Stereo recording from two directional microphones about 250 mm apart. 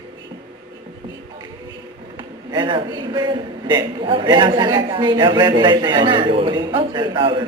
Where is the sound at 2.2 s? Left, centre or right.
Centre.